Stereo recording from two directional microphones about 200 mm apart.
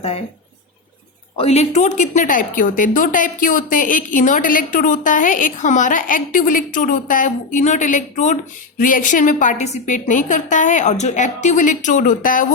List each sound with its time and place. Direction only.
1.4 s a woman's voice: 35° left (ahead or behind)